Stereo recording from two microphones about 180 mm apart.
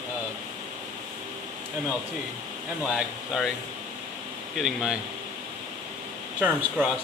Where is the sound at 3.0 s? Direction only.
Centre (ahead or behind).